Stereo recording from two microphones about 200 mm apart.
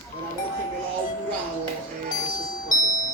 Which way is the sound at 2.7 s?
40° left (ahead or behind).